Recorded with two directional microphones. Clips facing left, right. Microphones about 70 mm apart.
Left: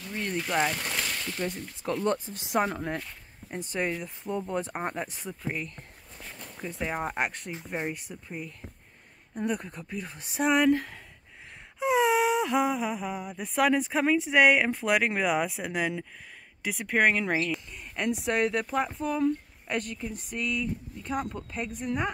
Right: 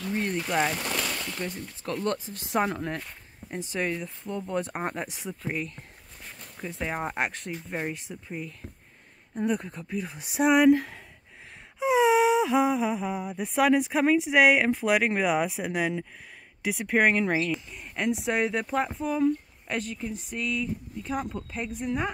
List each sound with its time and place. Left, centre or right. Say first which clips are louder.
0.3 s speech: left 1 dB; centre
7.5 s speech: right 1 dB; centre
7.9 s speech: right 2 dB; centre